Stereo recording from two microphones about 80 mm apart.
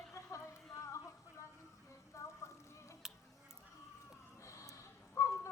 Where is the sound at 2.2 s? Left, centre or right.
Left.